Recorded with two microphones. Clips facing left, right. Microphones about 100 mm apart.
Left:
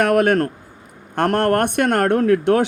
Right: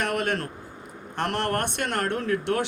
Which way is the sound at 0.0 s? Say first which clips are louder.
Left 11 dB; 55° left (ahead or behind).